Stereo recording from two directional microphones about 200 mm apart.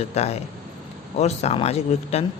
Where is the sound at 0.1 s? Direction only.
30° left (ahead or behind).